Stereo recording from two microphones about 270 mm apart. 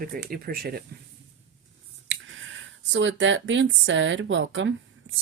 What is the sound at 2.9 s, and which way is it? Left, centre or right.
Speech, right.